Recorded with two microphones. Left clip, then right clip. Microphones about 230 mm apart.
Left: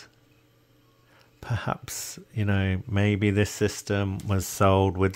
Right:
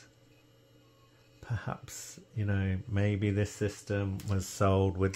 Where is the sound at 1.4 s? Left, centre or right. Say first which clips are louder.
Left 10 dB; left.